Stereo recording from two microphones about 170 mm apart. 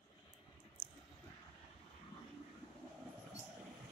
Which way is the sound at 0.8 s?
25° left (ahead or behind).